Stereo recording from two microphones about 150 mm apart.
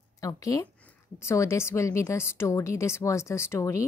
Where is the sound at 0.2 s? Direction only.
25° left (ahead or behind).